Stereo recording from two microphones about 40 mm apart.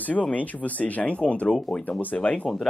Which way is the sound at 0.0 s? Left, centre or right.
Left.